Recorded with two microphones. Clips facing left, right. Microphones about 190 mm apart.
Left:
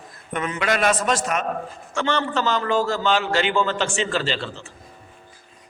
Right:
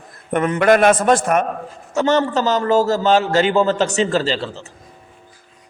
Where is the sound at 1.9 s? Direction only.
40° right (ahead or behind).